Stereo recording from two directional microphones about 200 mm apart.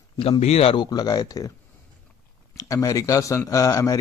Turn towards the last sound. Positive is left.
turn(degrees=15)  # may be behind; listen again after turning